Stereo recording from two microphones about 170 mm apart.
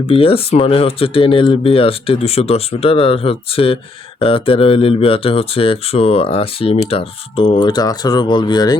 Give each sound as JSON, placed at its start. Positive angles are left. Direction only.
{"t": 0.1, "sound": "speech", "side_deg": 35}